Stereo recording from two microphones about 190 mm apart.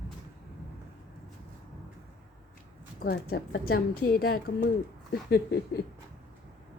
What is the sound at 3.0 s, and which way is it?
A woman's voice, 50° left (ahead or behind).